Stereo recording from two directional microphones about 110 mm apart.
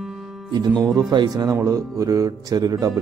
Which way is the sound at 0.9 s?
40° right (ahead or behind).